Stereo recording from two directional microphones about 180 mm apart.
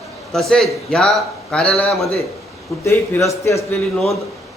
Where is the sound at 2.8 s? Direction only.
15° left (ahead or behind).